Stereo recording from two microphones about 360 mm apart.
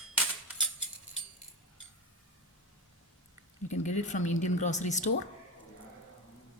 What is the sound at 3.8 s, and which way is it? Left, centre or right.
A woman's voice, centre.